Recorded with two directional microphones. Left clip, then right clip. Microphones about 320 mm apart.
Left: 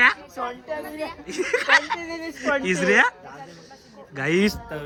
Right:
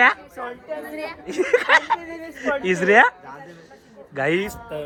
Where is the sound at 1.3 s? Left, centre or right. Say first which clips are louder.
Right 3 dB; centre.